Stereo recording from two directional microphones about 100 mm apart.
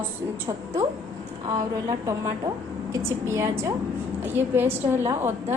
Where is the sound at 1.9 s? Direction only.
30° right (ahead or behind).